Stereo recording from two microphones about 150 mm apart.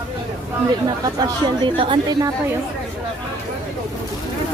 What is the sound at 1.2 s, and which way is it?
Speech, 35° right (ahead or behind).